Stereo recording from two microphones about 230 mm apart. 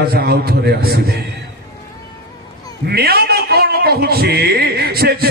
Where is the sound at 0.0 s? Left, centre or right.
Right.